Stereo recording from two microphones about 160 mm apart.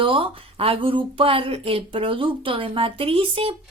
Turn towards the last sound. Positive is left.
turn(degrees=-35)  # may be behind; listen again after turning